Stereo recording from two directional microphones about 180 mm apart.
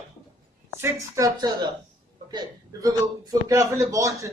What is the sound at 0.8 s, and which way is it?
Speech, 20° right (ahead or behind).